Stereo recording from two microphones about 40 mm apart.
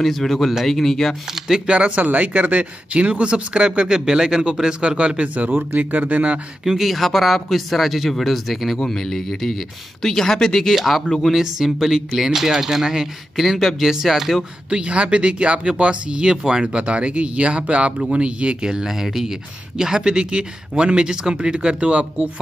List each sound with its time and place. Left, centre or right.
0.0 s speech: centre
1.7 s speech: right
6.6 s speech: centre
8.7 s speech: centre
11.3 s speech: centre
13.4 s speech: centre
14.7 s speech: right
18.7 s speech: centre; by 22.3 s right